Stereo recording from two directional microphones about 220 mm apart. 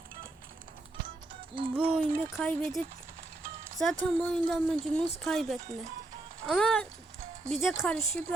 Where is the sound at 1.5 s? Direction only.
20° right (ahead or behind).